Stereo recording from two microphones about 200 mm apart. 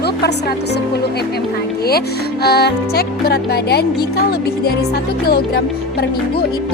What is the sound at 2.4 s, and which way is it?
Speech, 55° left (ahead or behind).